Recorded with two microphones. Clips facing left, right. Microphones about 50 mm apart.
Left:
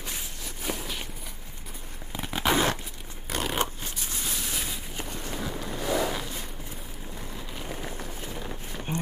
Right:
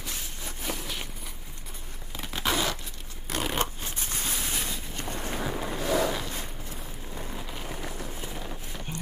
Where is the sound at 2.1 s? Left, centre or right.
Centre.